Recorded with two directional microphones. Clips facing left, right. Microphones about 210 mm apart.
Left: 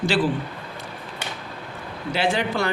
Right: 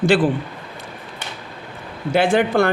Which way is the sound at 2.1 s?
50° right (ahead or behind).